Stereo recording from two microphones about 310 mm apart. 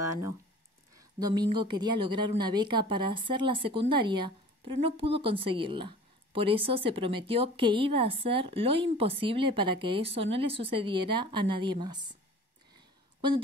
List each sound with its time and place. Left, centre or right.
0.9 s a woman's voice: centre